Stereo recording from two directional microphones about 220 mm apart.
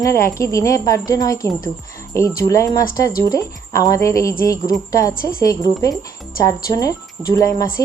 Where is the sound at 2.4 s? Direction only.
15° left (ahead or behind).